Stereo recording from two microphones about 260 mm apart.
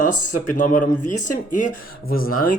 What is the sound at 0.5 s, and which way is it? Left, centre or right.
Speech, left.